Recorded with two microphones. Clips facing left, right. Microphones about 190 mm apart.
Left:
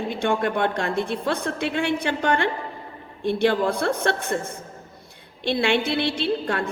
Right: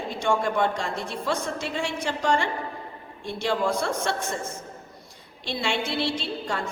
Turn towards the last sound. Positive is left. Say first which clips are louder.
# left 6 dB
turn(degrees=60)  # may be behind; listen again after turning